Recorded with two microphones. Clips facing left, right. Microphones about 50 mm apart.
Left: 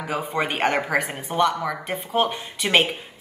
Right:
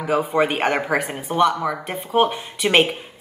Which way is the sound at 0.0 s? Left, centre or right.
Centre.